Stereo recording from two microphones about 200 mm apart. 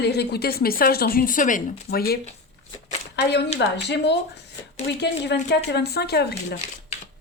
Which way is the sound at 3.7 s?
60° left (ahead or behind).